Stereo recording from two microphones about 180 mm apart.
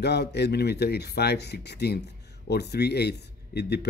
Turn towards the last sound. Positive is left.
turn(degrees=65)  # may be behind; listen again after turning